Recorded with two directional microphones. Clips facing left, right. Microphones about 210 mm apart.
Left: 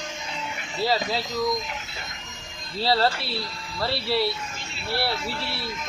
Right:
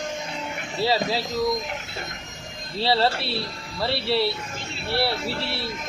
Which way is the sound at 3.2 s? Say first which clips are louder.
Right 3 dB; 25° right (ahead or behind).